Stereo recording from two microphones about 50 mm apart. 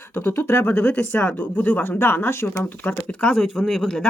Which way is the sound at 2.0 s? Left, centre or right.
Left.